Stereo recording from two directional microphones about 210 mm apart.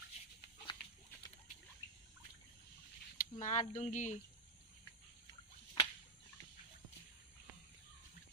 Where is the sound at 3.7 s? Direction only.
35° left (ahead or behind).